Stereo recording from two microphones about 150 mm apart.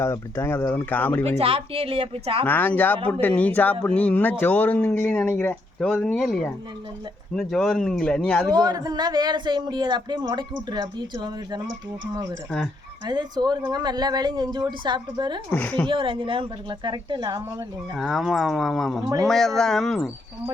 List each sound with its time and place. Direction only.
0.0 s speech: 15° left (ahead or behind)
1.4 s speech: 40° right (ahead or behind)
2.4 s speech: 15° left (ahead or behind)
8.4 s speech: 25° right (ahead or behind)
13.1 s speech: 30° right (ahead or behind)
15.5 s speech: 10° left (ahead or behind)
15.9 s speech: 35° right (ahead or behind)
17.9 s speech: centre (ahead or behind)